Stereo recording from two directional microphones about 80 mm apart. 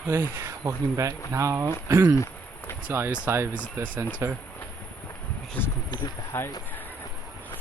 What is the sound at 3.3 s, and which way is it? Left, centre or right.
Speech, right.